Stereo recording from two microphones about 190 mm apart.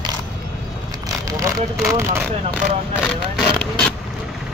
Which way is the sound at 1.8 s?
15° right (ahead or behind).